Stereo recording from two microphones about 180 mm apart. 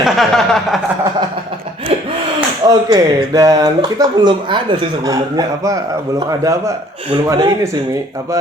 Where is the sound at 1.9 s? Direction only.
35° right (ahead or behind).